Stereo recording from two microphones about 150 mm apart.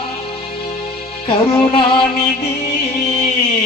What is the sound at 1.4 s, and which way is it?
Music, 35° left (ahead or behind).